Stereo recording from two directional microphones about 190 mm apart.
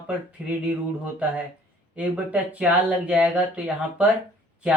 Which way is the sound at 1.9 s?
5° right (ahead or behind).